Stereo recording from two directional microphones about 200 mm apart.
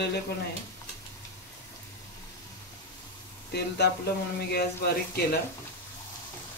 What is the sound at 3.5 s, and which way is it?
Speech, 55° left (ahead or behind).